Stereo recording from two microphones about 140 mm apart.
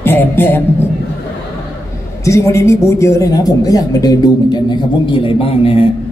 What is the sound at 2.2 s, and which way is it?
Speech, 20° left (ahead or behind).